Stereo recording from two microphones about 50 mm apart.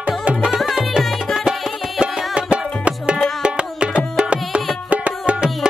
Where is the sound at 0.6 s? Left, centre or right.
Centre.